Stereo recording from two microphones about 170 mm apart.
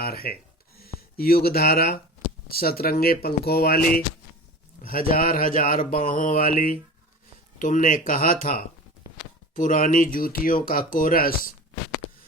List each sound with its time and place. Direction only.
0.0 s speech: 65° left (ahead or behind)